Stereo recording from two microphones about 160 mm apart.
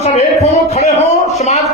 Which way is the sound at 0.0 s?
45° left (ahead or behind).